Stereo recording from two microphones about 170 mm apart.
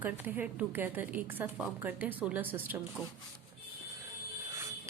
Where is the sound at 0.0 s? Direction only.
10° right (ahead or behind).